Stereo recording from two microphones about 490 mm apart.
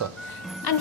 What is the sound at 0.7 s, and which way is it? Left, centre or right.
Speech, left.